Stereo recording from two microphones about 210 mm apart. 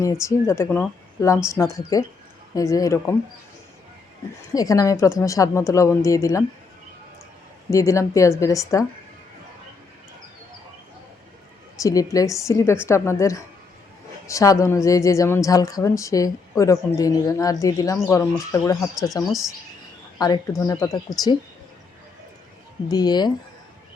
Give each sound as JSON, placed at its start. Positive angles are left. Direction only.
{"t": 0.0, "sound": "a woman's voice", "side_deg": 15}
{"t": 4.5, "sound": "a woman's voice", "side_deg": 15}
{"t": 7.7, "sound": "a woman's voice", "side_deg": 15}
{"t": 11.8, "sound": "a woman's voice", "side_deg": 15}
{"t": 19.3, "sound": "speech", "side_deg": 0}
{"t": 20.1, "sound": "a woman's voice", "side_deg": 15}
{"t": 22.9, "sound": "speech", "side_deg": 20}